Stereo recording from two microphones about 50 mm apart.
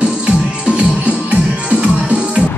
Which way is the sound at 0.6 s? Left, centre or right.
Right.